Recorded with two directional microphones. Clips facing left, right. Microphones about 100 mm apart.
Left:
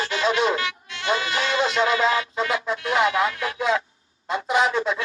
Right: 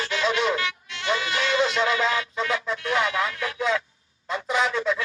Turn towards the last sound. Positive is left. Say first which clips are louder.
# left 2 dB
turn(degrees=30)  # may be behind; listen again after turning